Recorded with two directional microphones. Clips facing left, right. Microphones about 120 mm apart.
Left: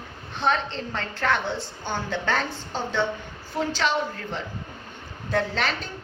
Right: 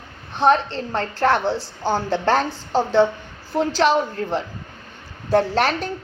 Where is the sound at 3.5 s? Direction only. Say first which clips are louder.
Right 7 dB; 45° right (ahead or behind).